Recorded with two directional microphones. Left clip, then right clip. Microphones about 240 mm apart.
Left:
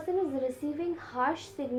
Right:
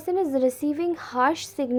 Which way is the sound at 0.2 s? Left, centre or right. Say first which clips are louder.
Right 8 dB; right.